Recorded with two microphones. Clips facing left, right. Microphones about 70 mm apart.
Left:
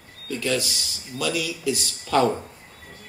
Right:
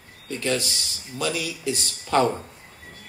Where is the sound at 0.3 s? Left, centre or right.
Right.